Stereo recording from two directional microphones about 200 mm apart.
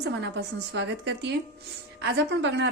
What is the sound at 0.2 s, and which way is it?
A woman's voice, 60° right (ahead or behind).